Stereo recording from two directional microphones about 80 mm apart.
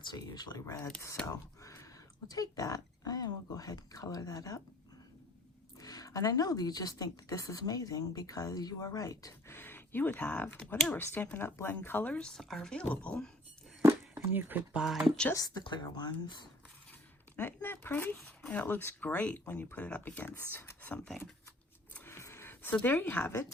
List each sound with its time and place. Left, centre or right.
0.0 s speech: left
1.2 s whispering: left
2.2 s a woman's voice: left
5.8 s a woman's voice: left
9.5 s speech: left; by 12.8 s centre
12.8 s speech: centre
14.3 s speech: right
14.8 s speech: centre
15.4 s speech: left
15.6 s speech: left
17.3 s speech: left
22.0 s a sound: left
22.7 s speech: centre